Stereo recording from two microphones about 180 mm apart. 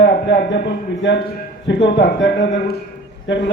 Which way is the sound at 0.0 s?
70° left (ahead or behind).